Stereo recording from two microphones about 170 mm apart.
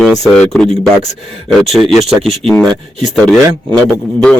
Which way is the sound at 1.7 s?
Centre (ahead or behind).